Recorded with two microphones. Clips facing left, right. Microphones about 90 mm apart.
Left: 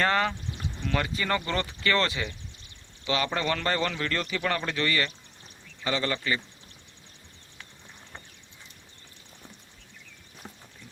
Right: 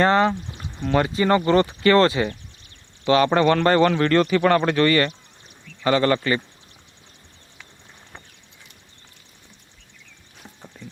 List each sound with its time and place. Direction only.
0.0 s a man's voice: 30° right (ahead or behind); by 6.4 s 55° right (ahead or behind)